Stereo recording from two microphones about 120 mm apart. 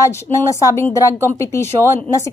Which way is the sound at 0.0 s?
25° left (ahead or behind).